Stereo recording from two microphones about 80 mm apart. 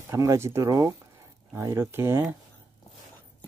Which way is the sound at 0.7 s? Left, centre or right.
Right.